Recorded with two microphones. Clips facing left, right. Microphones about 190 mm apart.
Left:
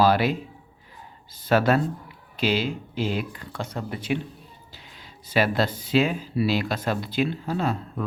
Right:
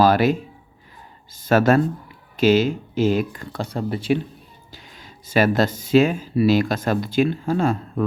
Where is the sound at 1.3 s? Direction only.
45° right (ahead or behind).